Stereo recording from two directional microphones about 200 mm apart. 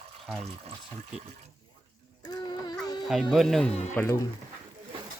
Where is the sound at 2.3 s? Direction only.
20° left (ahead or behind).